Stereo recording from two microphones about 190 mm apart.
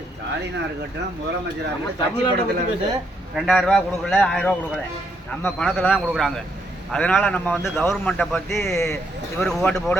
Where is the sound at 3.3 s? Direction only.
Centre (ahead or behind).